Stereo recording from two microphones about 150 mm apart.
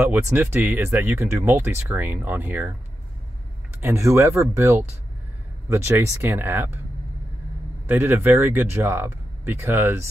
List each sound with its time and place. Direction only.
0.0 s speech: 15° right (ahead or behind)
3.8 s speech: 20° right (ahead or behind)
7.9 s speech: 15° right (ahead or behind)